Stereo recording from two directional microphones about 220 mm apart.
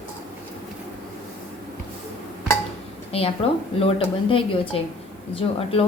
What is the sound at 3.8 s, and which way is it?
Speech, 25° left (ahead or behind).